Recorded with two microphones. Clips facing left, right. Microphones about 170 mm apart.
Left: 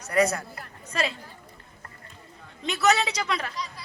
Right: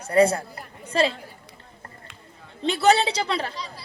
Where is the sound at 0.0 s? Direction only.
30° right (ahead or behind).